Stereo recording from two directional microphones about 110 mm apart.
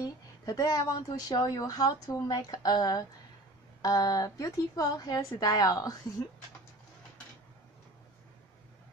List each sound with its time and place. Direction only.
0.5 s a woman's voice: 35° left (ahead or behind)